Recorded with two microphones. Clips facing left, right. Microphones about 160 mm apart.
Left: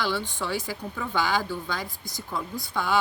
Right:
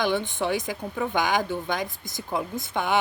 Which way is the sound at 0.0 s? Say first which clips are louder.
Right 4 dB; 20° right (ahead or behind).